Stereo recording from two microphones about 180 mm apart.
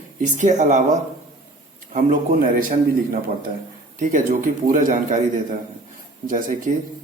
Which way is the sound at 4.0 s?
45° right (ahead or behind).